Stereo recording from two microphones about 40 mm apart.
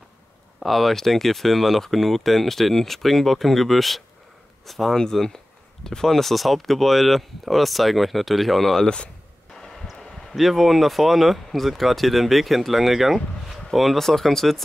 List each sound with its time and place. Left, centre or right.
0.6 s speech: centre
4.9 s speech: centre
8.8 s speech: left
10.3 s speech: centre